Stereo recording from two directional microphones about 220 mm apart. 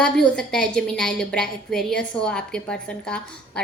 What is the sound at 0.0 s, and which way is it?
A woman's voice, 5° left (ahead or behind).